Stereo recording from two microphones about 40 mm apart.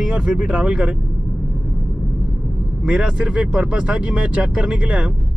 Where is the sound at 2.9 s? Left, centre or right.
Right.